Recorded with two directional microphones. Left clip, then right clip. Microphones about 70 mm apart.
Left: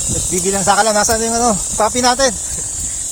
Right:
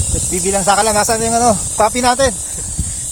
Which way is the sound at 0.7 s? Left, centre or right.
Right.